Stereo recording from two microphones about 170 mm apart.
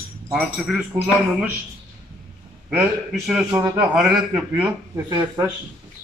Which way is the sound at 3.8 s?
5° right (ahead or behind).